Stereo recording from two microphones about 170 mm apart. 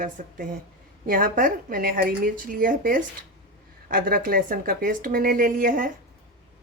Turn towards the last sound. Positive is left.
turn(degrees=-55)  # may be behind; listen again after turning